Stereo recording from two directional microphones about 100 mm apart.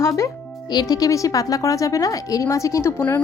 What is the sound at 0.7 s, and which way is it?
A woman's voice, 45° left (ahead or behind).